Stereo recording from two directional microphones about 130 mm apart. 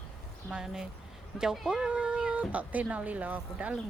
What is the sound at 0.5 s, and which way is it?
A woman's voice, 5° right (ahead or behind).